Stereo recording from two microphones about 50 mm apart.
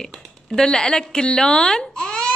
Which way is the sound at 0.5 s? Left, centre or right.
Centre.